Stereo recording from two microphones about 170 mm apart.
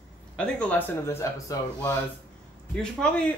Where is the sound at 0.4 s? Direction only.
10° left (ahead or behind).